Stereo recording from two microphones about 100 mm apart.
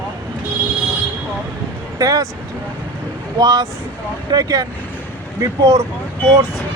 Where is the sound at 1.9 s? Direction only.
35° right (ahead or behind).